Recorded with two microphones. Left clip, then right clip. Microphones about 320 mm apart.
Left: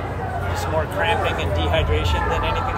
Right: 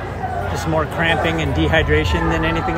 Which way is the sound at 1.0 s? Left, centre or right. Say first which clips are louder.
Right 2 dB; right.